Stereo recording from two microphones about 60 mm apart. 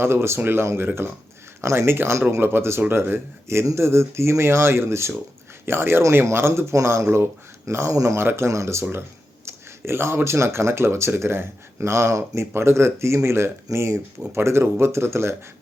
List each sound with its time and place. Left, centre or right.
0.0 s speech: right
7.9 s speech: right
8.2 s speech: right
8.4 s speech: right
13.7 s speech: right